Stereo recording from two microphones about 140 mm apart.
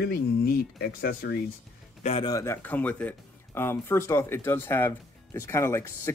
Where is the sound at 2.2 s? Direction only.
20° left (ahead or behind).